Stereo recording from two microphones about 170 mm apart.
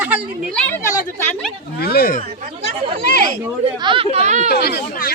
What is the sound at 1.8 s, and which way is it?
Speech, 65° left (ahead or behind).